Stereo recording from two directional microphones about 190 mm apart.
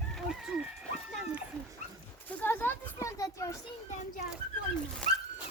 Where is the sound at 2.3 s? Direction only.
10° left (ahead or behind).